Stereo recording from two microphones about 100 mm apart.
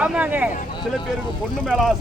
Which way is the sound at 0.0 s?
10° right (ahead or behind).